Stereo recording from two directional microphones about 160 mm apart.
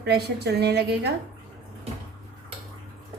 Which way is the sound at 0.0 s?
90° right.